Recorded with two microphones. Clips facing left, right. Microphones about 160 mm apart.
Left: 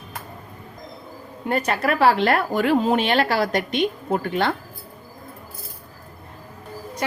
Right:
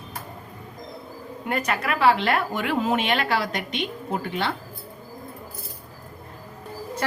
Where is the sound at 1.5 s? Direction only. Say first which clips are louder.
Left 4 dB; 30° left (ahead or behind); by 4.5 s 50° left (ahead or behind).